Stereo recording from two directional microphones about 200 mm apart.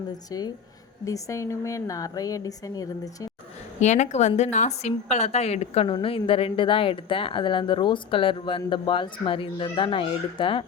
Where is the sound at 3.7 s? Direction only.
35° left (ahead or behind).